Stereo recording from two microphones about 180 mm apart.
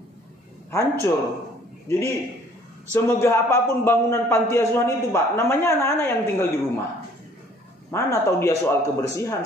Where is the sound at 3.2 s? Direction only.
15° left (ahead or behind).